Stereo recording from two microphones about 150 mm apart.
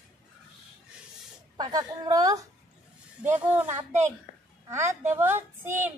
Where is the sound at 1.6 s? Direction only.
25° right (ahead or behind).